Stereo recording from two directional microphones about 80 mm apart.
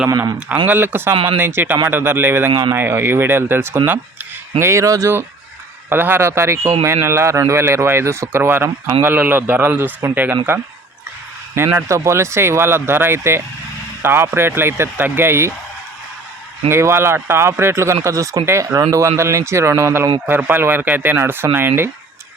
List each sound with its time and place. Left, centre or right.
0.3 s speech: centre
1.1 s speech: right
1.4 s a man's voice: right
5.9 s a man's voice: right
11.5 s a man's voice: right
16.6 s a man's voice: right